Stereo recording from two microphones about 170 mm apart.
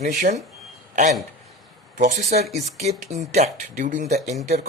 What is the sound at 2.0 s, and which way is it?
Speech, 45° right (ahead or behind).